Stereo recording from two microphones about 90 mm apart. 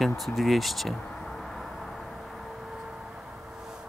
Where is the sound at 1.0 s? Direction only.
10° left (ahead or behind).